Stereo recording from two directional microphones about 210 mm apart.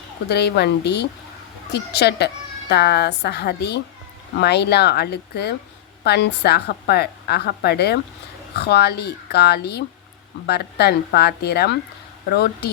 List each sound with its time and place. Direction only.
0.3 s a woman's voice: 50° left (ahead or behind)